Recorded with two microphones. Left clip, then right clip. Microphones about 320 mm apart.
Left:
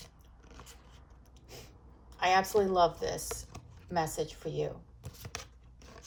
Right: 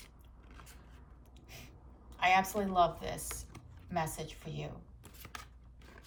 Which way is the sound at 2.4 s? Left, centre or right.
Centre.